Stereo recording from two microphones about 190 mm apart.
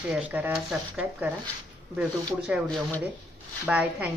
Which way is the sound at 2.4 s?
5° right (ahead or behind).